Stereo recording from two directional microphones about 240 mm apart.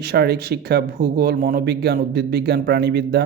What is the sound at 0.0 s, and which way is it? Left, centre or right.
Speech, right.